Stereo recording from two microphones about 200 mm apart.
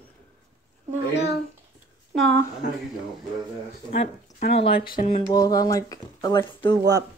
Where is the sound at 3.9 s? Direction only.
30° left (ahead or behind).